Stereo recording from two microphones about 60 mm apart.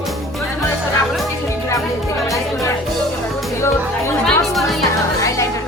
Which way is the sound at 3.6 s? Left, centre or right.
Left.